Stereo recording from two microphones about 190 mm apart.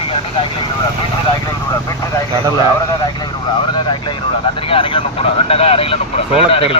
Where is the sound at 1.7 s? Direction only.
15° left (ahead or behind).